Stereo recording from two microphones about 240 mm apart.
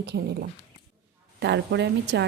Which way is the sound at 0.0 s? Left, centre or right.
Right.